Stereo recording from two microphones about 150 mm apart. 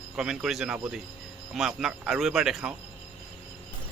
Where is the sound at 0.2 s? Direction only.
5° right (ahead or behind).